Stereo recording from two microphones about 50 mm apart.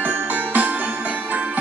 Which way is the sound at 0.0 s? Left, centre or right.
Right.